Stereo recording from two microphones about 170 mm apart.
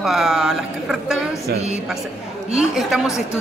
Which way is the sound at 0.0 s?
Centre (ahead or behind).